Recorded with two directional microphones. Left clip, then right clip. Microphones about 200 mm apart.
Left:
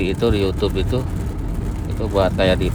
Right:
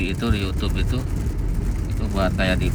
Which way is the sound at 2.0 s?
25° left (ahead or behind).